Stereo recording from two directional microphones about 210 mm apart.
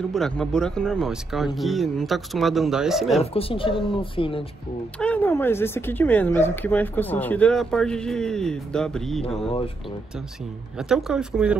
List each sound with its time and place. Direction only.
0.1 s speech: centre (ahead or behind)
3.2 s speech: 25° left (ahead or behind)
4.9 s speech: 5° left (ahead or behind)
9.5 s speech: 25° left (ahead or behind)
10.8 s speech: centre (ahead or behind)